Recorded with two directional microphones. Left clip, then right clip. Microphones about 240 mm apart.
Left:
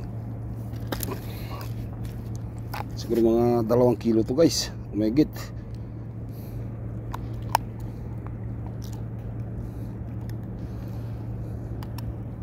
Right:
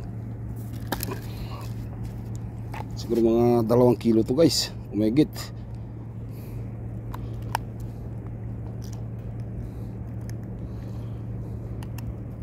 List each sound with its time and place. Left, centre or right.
3.1 s speech: centre